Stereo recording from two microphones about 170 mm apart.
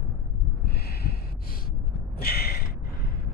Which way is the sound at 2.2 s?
65° left (ahead or behind).